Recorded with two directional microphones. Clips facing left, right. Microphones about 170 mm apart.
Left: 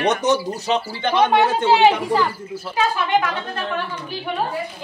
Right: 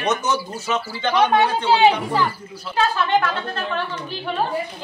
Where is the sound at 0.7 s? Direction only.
30° left (ahead or behind).